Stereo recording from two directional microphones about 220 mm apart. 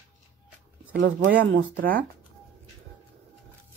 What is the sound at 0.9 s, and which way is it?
Speech, 60° right (ahead or behind).